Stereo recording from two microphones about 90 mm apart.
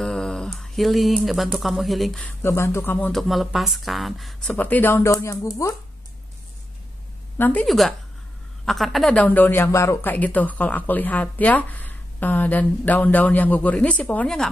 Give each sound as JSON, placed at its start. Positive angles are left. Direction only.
{"t": 0.0, "sound": "speech", "side_deg": 5}
{"t": 2.4, "sound": "speech", "side_deg": 30}
{"t": 3.1, "sound": "speech", "side_deg": 0}
{"t": 4.5, "sound": "speech", "side_deg": 20}
{"t": 4.9, "sound": "speech", "side_deg": 30}
{"t": 7.3, "sound": "a woman's voice", "side_deg": 25}
{"t": 7.6, "sound": "speech", "side_deg": 0}
{"t": 9.1, "sound": "speech", "side_deg": 15}
{"t": 10.0, "sound": "speech", "side_deg": 20}